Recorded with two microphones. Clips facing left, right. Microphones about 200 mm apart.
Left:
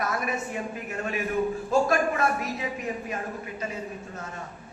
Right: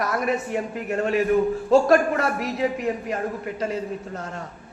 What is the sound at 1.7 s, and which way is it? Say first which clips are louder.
Speech: right 7 dB; 70° right (ahead or behind).